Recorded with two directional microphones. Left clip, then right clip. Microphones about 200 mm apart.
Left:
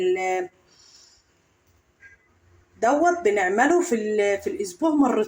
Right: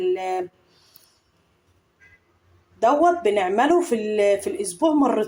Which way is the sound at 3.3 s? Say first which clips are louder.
Right 1 dB; 15° right (ahead or behind).